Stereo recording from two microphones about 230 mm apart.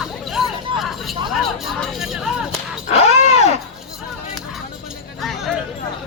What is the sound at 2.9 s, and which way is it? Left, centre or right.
Groan, left.